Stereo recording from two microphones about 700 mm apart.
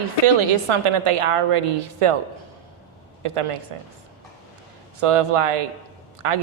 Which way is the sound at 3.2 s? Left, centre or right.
Right.